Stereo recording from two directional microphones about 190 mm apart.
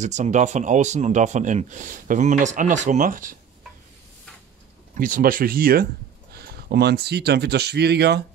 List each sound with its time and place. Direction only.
0.0 s speech: 40° right (ahead or behind)
4.9 s speech: 45° right (ahead or behind); by 8.2 s 60° right (ahead or behind)